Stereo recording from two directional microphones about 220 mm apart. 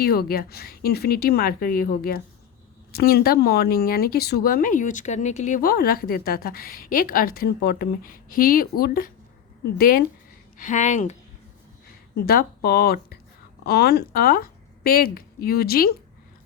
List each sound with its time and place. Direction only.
0.0 s speech: 45° left (ahead or behind)
12.2 s speech: 45° left (ahead or behind)